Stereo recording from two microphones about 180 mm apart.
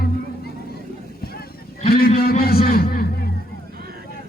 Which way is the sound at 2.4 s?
55° left (ahead or behind).